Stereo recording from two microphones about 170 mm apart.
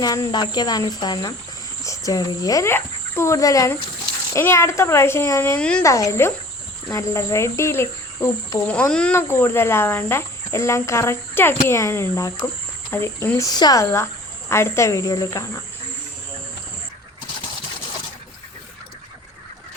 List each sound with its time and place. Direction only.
0.0 s cricket: 20° left (ahead or behind)
1.8 s speech: 20° left (ahead or behind)
4.4 s cricket: 15° left (ahead or behind)
5.8 s cricket: 15° left (ahead or behind)